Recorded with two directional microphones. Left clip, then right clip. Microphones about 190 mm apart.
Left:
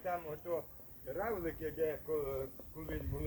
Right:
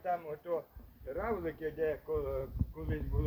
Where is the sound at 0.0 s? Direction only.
50° right (ahead or behind).